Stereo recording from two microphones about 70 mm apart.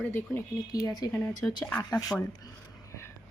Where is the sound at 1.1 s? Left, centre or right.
Left.